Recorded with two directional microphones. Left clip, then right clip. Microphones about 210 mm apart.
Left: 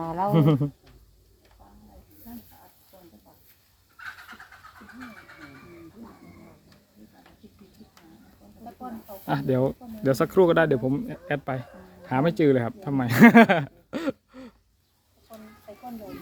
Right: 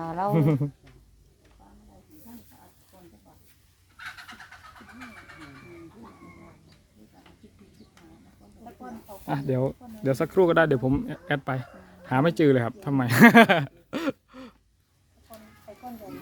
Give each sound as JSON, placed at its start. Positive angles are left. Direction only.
{"t": 0.0, "sound": "a sound", "side_deg": -25}
{"t": 0.3, "sound": "speech", "side_deg": 5}
{"t": 2.9, "sound": "a sound", "side_deg": 10}
{"t": 8.6, "sound": "chicken", "side_deg": 15}
{"t": 9.2, "sound": "speech", "side_deg": 5}
{"t": 10.8, "sound": "speech", "side_deg": -15}